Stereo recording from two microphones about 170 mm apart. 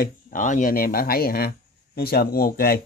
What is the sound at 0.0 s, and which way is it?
Speech, 50° left (ahead or behind).